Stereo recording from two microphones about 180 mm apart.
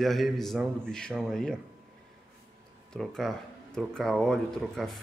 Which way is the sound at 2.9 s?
Centre (ahead or behind).